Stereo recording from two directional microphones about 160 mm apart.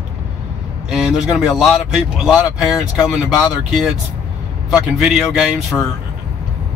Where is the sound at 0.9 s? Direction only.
Centre (ahead or behind).